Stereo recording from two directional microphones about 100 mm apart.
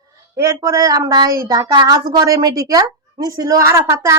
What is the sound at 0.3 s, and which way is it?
A child's voice, 30° right (ahead or behind).